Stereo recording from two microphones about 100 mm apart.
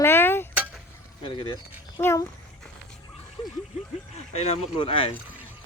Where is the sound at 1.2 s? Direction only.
55° left (ahead or behind).